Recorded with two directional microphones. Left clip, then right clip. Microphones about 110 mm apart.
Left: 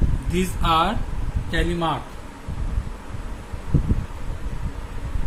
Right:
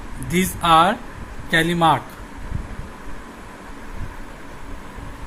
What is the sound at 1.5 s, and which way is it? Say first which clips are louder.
Speech: right 8 dB; 65° right (ahead or behind).